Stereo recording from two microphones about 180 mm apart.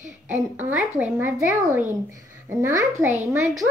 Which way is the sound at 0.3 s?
10° right (ahead or behind).